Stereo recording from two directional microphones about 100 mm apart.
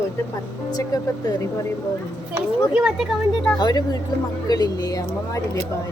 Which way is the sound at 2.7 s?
5° right (ahead or behind).